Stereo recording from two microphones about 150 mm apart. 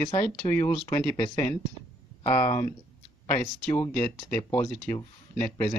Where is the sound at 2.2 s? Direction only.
50° left (ahead or behind).